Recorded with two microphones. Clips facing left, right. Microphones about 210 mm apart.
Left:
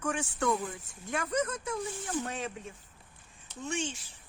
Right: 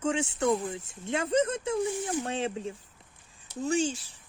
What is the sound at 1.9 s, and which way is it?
Speech, 15° right (ahead or behind).